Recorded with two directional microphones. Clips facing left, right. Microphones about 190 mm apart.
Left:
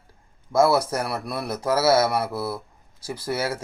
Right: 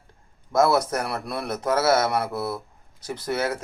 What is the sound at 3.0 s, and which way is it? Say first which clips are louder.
Speech: even; 20° right (ahead or behind).